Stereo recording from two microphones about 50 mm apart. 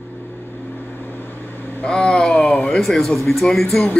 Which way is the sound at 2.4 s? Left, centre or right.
Left.